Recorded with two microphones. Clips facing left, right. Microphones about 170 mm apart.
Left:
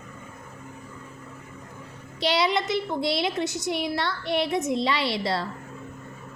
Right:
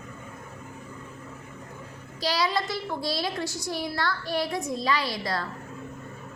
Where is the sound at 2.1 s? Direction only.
25° left (ahead or behind).